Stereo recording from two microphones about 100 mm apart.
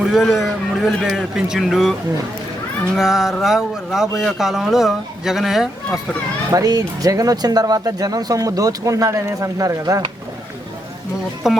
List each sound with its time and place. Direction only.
0.0 s speech: centre (ahead or behind)
6.5 s speech: 40° right (ahead or behind)
11.4 s speech: 5° right (ahead or behind)